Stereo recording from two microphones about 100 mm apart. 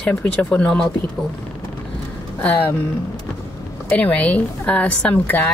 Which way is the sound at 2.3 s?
15° left (ahead or behind).